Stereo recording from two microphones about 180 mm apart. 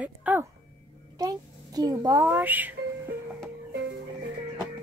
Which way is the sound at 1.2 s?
20° right (ahead or behind).